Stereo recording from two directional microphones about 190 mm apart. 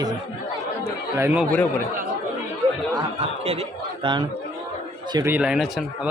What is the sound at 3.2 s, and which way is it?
A man's voice, 30° right (ahead or behind).